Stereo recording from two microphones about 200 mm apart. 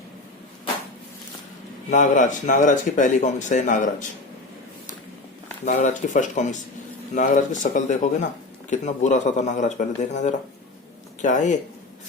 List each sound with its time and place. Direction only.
1.9 s speech: 40° left (ahead or behind)
5.6 s speech: 35° left (ahead or behind)